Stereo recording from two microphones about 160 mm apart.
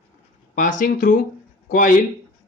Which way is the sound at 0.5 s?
55° left (ahead or behind).